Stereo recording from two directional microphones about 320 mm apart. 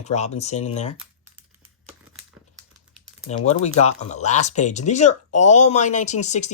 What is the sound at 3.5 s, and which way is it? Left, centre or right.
Speech, centre.